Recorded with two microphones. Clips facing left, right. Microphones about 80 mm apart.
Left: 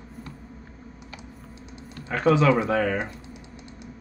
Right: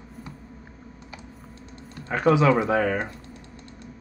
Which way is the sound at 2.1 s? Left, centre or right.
Centre.